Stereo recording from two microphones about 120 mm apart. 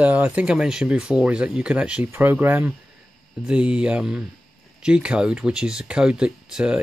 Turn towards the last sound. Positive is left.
turn(degrees=-5)  # may be behind; listen again after turning